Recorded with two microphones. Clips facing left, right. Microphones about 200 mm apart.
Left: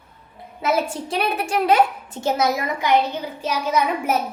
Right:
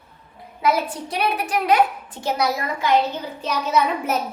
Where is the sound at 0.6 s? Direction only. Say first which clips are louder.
Even; 25° left (ahead or behind).